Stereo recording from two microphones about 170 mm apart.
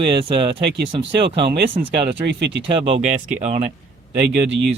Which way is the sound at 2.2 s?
90° right.